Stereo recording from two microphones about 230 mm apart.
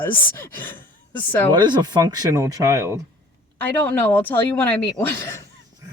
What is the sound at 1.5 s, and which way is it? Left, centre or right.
Speech, centre.